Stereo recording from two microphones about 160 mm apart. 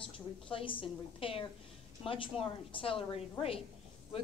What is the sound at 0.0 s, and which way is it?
A woman's voice, 35° left (ahead or behind).